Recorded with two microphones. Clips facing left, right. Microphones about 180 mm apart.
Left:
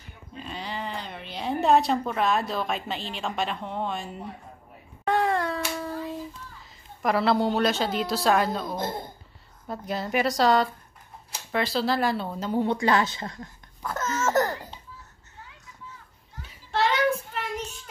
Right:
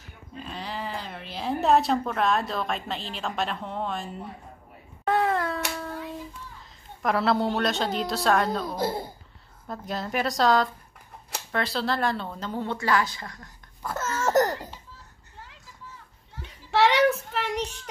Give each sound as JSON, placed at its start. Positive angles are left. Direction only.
{"t": 0.4, "sound": "speech", "side_deg": 0}
{"t": 5.0, "sound": "a sound", "side_deg": 0}
{"t": 7.0, "sound": "a woman's voice", "side_deg": 0}
{"t": 8.7, "sound": "speech", "side_deg": -10}
{"t": 9.7, "sound": "a woman's voice", "side_deg": 0}
{"t": 13.8, "sound": "laughter", "side_deg": -5}
{"t": 16.7, "sound": "child singing", "side_deg": -75}